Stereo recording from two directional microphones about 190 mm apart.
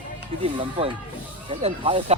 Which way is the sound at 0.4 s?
30° right (ahead or behind).